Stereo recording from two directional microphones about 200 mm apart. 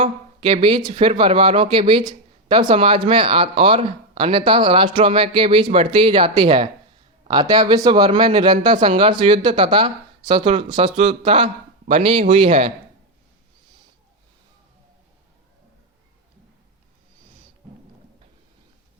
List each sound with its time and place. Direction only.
0.0 s speech: 30° right (ahead or behind)